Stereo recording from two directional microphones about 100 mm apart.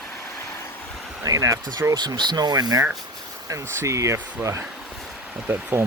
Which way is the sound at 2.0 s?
45° right (ahead or behind).